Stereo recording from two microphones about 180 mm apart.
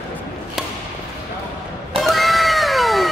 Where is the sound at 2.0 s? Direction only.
Centre (ahead or behind).